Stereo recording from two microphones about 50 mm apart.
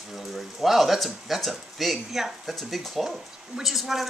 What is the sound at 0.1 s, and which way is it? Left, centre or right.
A woman's voice, centre.